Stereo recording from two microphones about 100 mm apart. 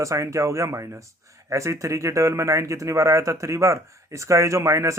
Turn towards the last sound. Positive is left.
turn(degrees=-30)  # may be behind; listen again after turning